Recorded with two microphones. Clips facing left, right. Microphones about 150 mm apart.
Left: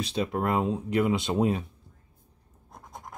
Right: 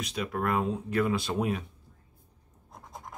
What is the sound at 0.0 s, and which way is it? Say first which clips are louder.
Speech: left 3 dB; 30° left (ahead or behind).